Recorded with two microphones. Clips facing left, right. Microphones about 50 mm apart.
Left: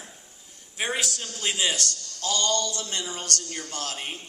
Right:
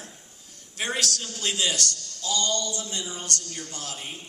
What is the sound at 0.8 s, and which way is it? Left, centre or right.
Speech, centre.